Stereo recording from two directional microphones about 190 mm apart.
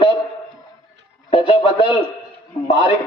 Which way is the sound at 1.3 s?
30° left (ahead or behind).